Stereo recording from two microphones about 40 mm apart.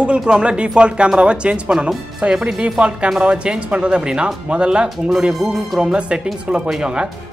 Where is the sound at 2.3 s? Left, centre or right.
Centre.